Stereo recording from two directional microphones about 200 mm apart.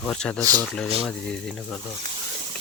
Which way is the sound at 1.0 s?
Centre (ahead or behind).